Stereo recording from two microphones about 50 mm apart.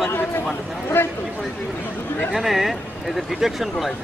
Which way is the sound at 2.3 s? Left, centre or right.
Centre.